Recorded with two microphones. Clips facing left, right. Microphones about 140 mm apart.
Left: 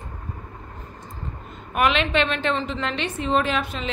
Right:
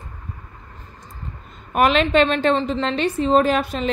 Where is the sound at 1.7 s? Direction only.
40° right (ahead or behind).